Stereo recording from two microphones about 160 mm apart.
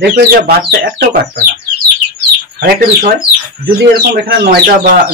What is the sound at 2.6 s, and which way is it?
Speech, 65° right (ahead or behind).